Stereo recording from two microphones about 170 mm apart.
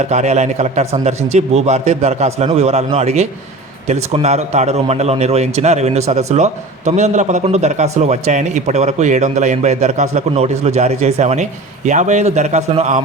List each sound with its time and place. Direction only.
0.0 s a man's voice: 40° right (ahead or behind)